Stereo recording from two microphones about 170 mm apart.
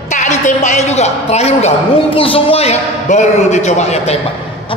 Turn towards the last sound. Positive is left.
turn(degrees=40)  # may be behind; listen again after turning